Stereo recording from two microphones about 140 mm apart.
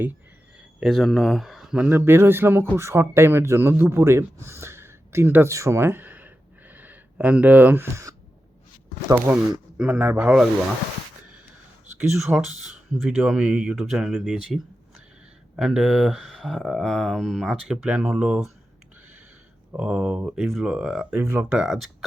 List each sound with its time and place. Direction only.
0.8 s speech: centre (ahead or behind)
12.1 s speech: centre (ahead or behind)
19.7 s speech: 10° right (ahead or behind)